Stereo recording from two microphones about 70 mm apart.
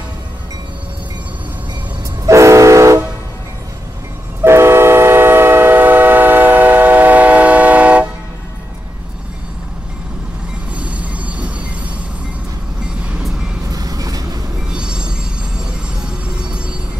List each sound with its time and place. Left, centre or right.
2.2 s train: right
4.4 s train: right; by 8.1 s centre
10.8 s train: centre
13.7 s train: right
14.7 s train: centre